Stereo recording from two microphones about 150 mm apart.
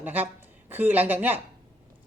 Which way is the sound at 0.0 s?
10° right (ahead or behind).